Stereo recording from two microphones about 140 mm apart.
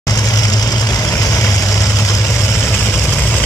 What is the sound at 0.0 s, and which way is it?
Vehicle, 25° left (ahead or behind).